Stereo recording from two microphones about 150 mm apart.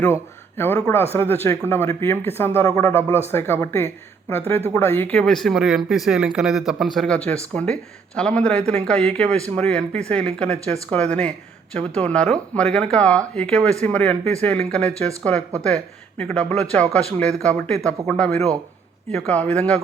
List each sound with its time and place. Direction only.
0.0 s speech: 15° left (ahead or behind)